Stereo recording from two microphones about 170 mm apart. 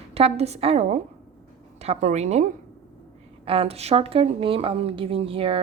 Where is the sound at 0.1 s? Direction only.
35° right (ahead or behind).